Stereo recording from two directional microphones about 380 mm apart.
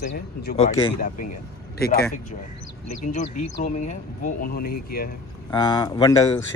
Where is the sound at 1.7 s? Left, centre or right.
Left.